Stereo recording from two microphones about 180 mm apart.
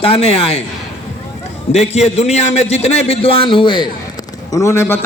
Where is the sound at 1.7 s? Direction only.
35° left (ahead or behind).